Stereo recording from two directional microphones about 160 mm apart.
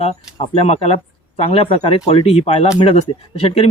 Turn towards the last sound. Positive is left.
turn(degrees=40)  # may be behind; listen again after turning